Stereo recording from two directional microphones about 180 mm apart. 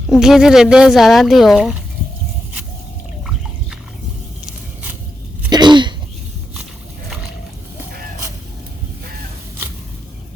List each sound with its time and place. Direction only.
0.1 s speech: 5° right (ahead or behind)
5.5 s sneeze: 25° right (ahead or behind)